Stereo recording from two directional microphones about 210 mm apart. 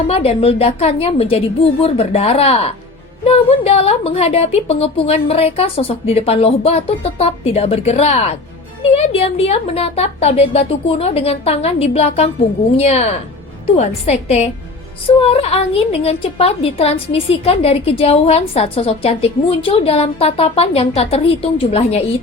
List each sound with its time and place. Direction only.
0.1 s a woman's voice: 30° left (ahead or behind)